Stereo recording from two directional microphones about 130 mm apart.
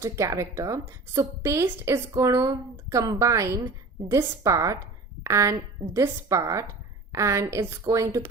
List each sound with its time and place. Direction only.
0.0 s a woman's voice: 20° right (ahead or behind)